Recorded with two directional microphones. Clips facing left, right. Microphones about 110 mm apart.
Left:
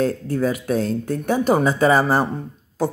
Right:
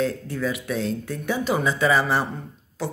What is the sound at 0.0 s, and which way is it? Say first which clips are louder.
Speech: left 5 dB; 45° left (ahead or behind).